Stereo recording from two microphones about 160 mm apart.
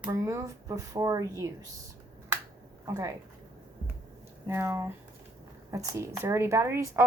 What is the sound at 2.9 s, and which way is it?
Speech, 20° right (ahead or behind).